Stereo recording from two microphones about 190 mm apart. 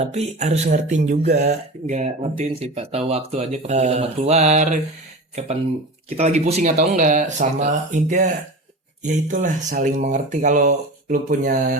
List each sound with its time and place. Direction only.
0.0 s speech: 35° right (ahead or behind)